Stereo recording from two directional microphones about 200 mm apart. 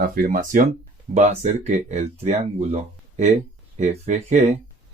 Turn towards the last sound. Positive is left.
turn(degrees=-35)  # may be behind; listen again after turning